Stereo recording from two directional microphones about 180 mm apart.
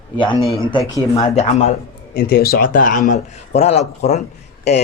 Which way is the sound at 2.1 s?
55° left (ahead or behind).